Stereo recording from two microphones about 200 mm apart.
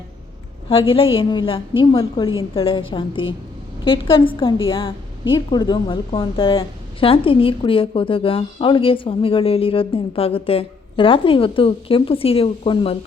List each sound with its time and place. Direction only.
0.7 s a woman's voice: 25° left (ahead or behind)